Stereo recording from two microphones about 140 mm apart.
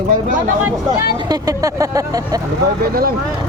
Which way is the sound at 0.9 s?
25° right (ahead or behind).